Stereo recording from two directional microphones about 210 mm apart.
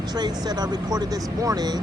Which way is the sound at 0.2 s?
20° right (ahead or behind).